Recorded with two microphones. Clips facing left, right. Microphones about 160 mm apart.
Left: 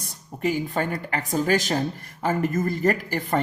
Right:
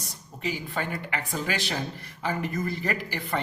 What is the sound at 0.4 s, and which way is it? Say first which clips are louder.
Speech: left 7 dB; 45° left (ahead or behind).